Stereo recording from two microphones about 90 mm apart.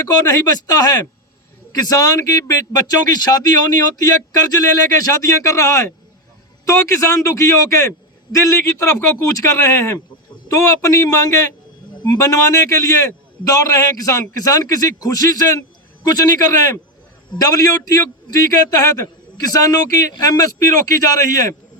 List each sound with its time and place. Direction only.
0.0 s a man's voice: 45° left (ahead or behind)